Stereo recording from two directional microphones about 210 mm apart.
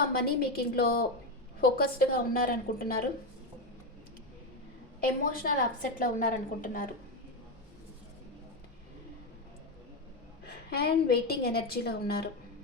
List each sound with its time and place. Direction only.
0.3 s a woman's voice: 45° left (ahead or behind)
4.9 s a woman's voice: 40° left (ahead or behind)
10.4 s a woman's voice: 50° left (ahead or behind)